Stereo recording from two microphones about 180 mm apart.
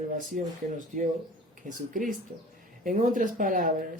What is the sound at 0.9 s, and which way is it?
Speech, 45° right (ahead or behind).